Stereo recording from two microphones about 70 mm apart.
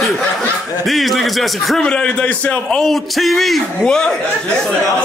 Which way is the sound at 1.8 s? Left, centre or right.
Centre.